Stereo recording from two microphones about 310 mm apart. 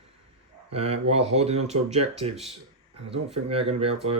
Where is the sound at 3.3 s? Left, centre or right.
Centre.